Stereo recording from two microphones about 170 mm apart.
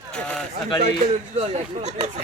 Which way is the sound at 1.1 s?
40° right (ahead or behind).